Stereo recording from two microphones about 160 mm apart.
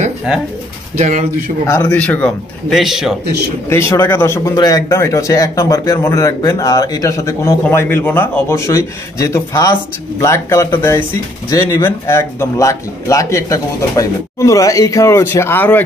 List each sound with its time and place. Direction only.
0.9 s speech: 40° right (ahead or behind)
1.7 s a man's voice: 15° left (ahead or behind); by 3.2 s centre (ahead or behind)
3.6 s a man's voice: 15° left (ahead or behind)